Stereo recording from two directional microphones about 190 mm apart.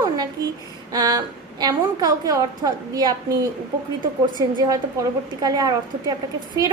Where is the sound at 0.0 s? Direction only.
20° right (ahead or behind).